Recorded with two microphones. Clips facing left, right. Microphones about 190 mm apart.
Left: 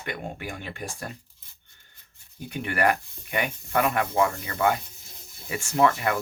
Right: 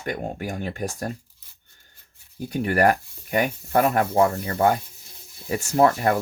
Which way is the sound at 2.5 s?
40° right (ahead or behind).